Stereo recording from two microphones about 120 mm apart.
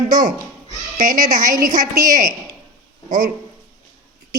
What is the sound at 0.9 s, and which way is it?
A woman's voice, 90° right.